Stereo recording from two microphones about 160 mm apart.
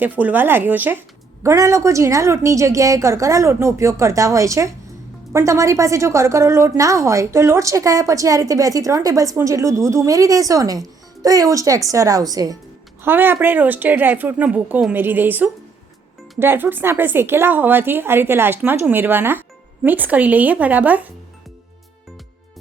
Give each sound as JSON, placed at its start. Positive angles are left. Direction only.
{"t": 0.0, "sound": "a woman's voice", "side_deg": -10}